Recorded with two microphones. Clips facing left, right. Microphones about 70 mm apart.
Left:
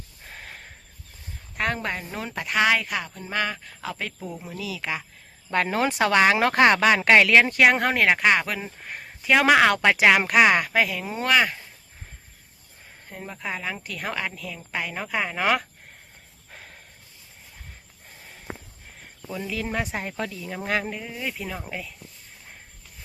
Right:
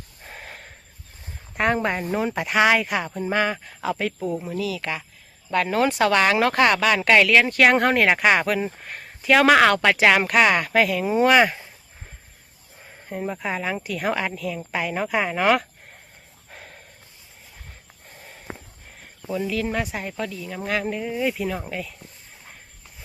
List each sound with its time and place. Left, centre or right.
0.3 s snort: centre
1.5 s speech: right; by 5.0 s centre
5.5 s speech: left
7.5 s speech: centre
10.7 s speech: centre
11.0 s speech: centre
13.1 s speech: centre
19.3 s speech: centre
19.5 s speech: centre
19.9 s speech: left
20.8 s speech: centre